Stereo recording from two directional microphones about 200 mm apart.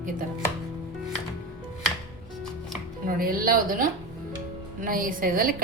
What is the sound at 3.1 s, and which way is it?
A woman's voice, 45° right (ahead or behind).